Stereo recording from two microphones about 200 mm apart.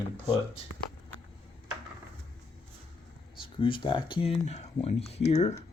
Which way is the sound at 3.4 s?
25° left (ahead or behind).